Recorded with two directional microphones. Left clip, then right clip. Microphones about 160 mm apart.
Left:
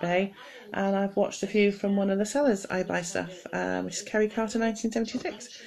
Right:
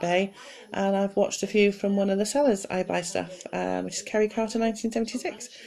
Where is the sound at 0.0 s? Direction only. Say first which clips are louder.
Right 2 dB; 25° right (ahead or behind).